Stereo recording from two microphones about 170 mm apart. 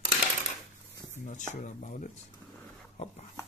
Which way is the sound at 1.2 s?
45° left (ahead or behind).